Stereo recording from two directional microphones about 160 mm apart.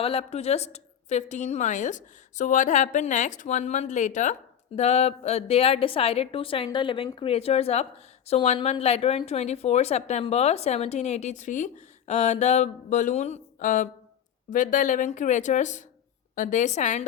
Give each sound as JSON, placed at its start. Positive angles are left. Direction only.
{"t": 0.0, "sound": "a woman's voice", "side_deg": 35}